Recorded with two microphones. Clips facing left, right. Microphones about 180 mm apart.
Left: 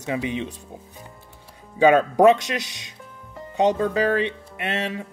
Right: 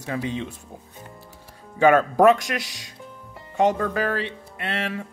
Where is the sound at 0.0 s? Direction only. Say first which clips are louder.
Left 2 dB; 15° left (ahead or behind).